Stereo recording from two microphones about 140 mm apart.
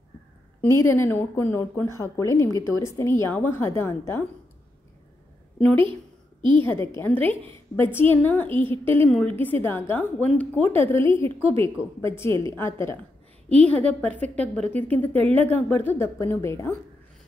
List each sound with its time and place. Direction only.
0.6 s a woman's voice: 15° left (ahead or behind)
5.6 s a woman's voice: 10° left (ahead or behind)
8.7 s a woman's voice: 40° right (ahead or behind)
9.4 s a woman's voice: 15° left (ahead or behind)